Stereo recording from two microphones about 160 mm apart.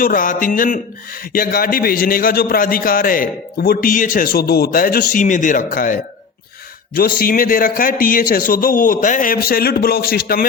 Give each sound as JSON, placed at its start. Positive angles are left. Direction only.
{"t": 0.0, "sound": "a man's voice", "side_deg": 60}